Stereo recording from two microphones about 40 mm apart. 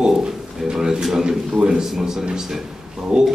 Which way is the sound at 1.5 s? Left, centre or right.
Centre.